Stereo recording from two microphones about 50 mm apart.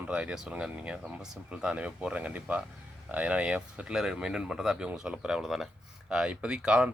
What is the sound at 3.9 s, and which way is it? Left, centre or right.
Speech, centre.